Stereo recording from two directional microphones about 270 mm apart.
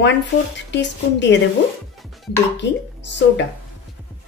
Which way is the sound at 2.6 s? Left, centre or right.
Left.